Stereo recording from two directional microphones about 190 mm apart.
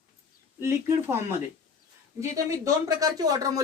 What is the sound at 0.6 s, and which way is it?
Speech, 15° right (ahead or behind).